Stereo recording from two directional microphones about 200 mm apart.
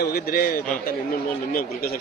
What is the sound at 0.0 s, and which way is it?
A man's voice, 50° left (ahead or behind).